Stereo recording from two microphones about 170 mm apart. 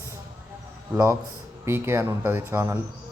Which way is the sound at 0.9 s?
20° right (ahead or behind).